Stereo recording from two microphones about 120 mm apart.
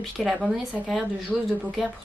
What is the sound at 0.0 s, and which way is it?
Speech, centre (ahead or behind).